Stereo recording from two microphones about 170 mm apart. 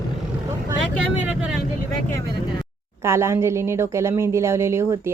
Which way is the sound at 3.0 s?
15° right (ahead or behind).